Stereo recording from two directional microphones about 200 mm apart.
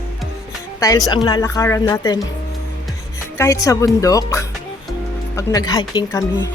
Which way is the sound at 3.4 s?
15° left (ahead or behind).